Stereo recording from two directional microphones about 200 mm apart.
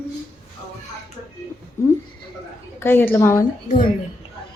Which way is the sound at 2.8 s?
10° left (ahead or behind).